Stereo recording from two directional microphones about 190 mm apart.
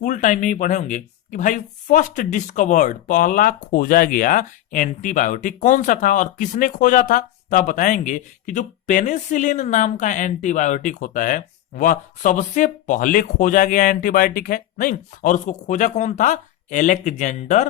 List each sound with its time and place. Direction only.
0.0 s speech: 45° left (ahead or behind)